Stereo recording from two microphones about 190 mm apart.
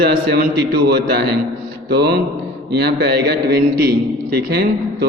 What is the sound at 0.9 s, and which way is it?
A man's voice, 60° right (ahead or behind).